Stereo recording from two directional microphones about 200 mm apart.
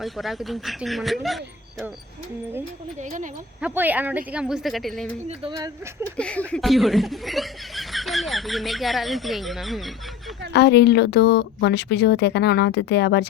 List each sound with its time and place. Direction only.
0.0 s speech: centre (ahead or behind)
3.0 s speech: 40° right (ahead or behind)
3.6 s speech: 10° right (ahead or behind)
5.3 s speech: 25° right (ahead or behind)
6.1 s speech: 5° left (ahead or behind)
10.5 s speech: 55° left (ahead or behind)